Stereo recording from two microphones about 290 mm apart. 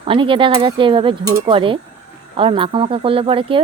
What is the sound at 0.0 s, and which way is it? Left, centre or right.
Speech, centre.